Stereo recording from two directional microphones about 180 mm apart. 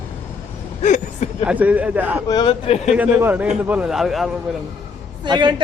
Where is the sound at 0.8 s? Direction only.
40° left (ahead or behind).